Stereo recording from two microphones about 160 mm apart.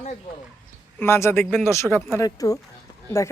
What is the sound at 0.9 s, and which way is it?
A woman's voice, 15° left (ahead or behind).